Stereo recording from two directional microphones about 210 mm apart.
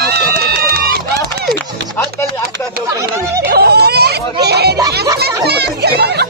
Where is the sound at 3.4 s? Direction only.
50° right (ahead or behind).